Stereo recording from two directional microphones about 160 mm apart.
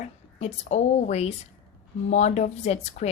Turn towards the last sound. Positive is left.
turn(degrees=40)  # may be behind; listen again after turning